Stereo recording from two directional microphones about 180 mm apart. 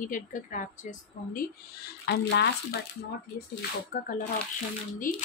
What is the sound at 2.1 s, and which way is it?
Speech, 70° left (ahead or behind).